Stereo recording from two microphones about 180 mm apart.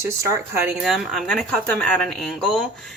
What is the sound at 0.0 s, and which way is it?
Speech, 15° right (ahead or behind).